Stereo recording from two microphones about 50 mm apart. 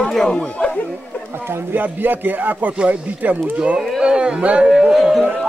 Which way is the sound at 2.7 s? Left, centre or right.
Right.